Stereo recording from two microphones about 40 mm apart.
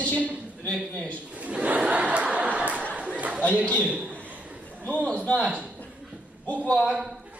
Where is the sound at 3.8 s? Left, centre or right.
Right.